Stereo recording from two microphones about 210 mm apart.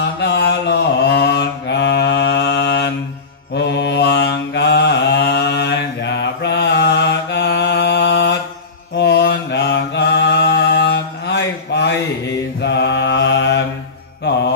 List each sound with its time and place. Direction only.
0.0 s mantra: 55° left (ahead or behind)